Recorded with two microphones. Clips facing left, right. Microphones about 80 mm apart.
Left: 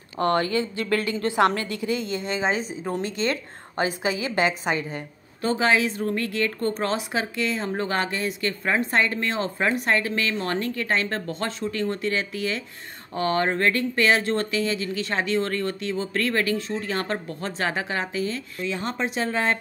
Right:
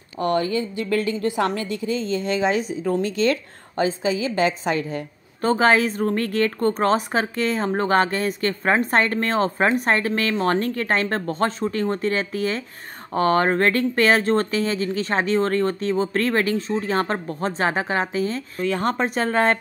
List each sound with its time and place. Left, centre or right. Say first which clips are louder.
0.2 s a woman's voice: right 1 dB; left
1.7 s a woman's voice: right 2 dB; right
2.1 s a woman's voice: right 4 dB; left
5.4 s a woman's voice: right 4 dB; right